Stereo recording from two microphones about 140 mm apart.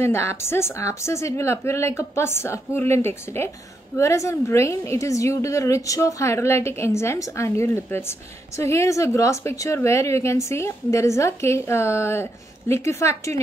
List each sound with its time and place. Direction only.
0.0 s a woman's voice: 15° left (ahead or behind)